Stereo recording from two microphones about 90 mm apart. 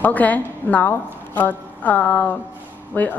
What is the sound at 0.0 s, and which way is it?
A woman's voice, 15° left (ahead or behind).